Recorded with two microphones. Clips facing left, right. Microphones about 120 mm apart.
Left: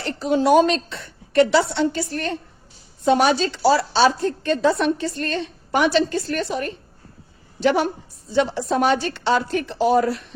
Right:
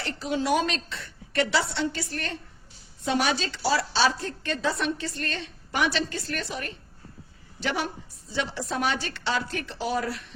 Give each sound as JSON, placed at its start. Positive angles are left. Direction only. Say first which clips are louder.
{"t": 0.2, "sound": "a woman's voice", "louder": "left 10 dB", "side_deg": 40}